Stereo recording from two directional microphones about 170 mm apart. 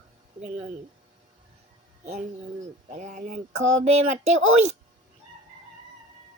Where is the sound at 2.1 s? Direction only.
45° right (ahead or behind).